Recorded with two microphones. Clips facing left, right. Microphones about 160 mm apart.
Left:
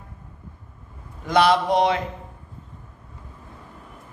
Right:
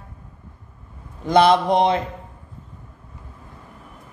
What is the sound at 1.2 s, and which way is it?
Speech, 25° right (ahead or behind).